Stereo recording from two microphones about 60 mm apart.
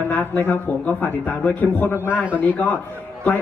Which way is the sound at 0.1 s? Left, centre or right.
Left.